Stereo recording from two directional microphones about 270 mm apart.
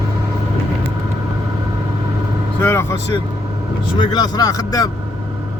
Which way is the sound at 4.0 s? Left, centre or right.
Centre.